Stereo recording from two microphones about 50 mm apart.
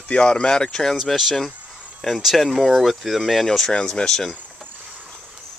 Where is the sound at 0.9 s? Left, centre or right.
Centre.